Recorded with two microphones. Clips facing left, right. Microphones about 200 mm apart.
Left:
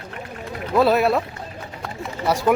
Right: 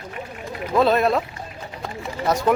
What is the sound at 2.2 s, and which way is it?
Speech, 10° left (ahead or behind).